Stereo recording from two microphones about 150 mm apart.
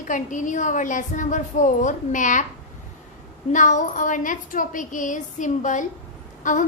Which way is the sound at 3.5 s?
55° left (ahead or behind).